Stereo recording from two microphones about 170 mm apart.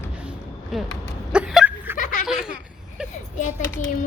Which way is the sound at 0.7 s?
Centre (ahead or behind).